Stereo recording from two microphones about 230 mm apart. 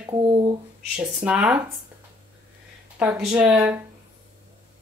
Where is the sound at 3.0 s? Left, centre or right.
Centre.